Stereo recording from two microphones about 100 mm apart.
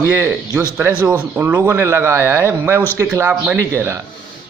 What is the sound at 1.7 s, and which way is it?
A man's voice, 25° right (ahead or behind).